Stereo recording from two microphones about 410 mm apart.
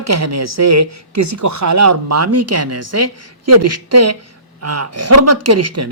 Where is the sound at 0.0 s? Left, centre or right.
Right.